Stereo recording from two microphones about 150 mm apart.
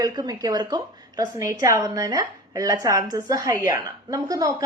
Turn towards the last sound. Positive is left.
turn(degrees=-25)  # may be behind; listen again after turning